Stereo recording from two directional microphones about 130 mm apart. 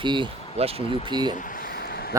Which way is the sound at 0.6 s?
50° right (ahead or behind).